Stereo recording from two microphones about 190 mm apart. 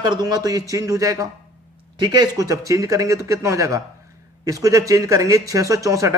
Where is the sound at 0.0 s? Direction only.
20° right (ahead or behind).